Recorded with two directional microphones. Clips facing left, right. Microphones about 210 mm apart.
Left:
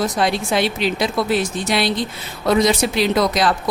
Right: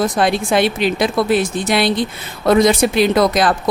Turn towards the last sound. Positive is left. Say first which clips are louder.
# right 4 dB
turn(degrees=-50)  # may be behind; listen again after turning